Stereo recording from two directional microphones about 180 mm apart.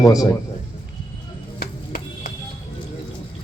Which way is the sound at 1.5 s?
55° left (ahead or behind).